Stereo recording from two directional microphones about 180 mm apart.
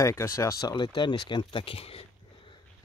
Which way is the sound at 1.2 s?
25° left (ahead or behind).